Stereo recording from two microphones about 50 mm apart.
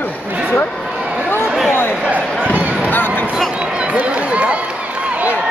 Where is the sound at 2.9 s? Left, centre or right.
Left.